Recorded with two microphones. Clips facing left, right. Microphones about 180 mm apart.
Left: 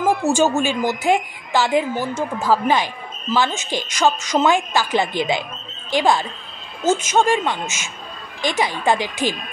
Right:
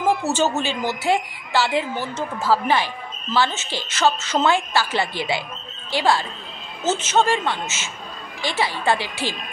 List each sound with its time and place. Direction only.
0.0 s speech: 10° left (ahead or behind)